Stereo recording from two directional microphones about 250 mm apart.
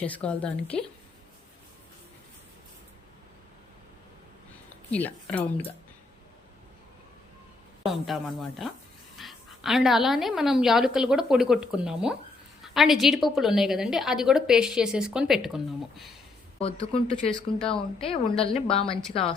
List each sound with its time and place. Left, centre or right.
0.0 s a woman's voice: centre
4.9 s speech: centre
7.9 s a woman's voice: centre
16.9 s a woman's voice: left